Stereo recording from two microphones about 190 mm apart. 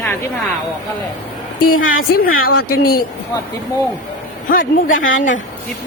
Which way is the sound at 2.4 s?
55° left (ahead or behind).